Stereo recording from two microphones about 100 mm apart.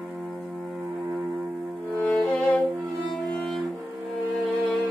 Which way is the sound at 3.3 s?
Centre (ahead or behind).